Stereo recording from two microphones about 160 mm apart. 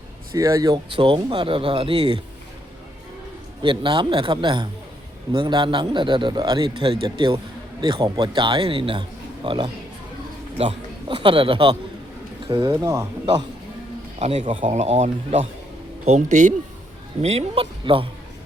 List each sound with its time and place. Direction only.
0.3 s a man's voice: 20° right (ahead or behind)
3.6 s a man's voice: 30° right (ahead or behind)
12.8 s a man's voice: 20° right (ahead or behind)
14.2 s speech: 45° right (ahead or behind)
17.2 s speech: 40° right (ahead or behind)